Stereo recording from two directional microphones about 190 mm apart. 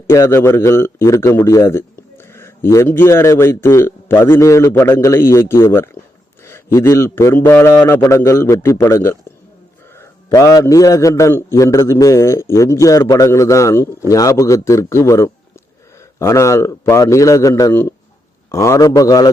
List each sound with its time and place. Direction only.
0.1 s a man's voice: 15° left (ahead or behind)